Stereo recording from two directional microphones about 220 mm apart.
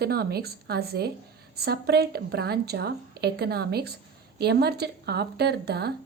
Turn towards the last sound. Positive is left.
turn(degrees=-45)  # may be behind; listen again after turning